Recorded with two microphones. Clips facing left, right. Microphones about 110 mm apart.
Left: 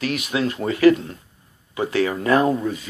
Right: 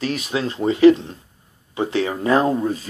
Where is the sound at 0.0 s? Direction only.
30° right (ahead or behind).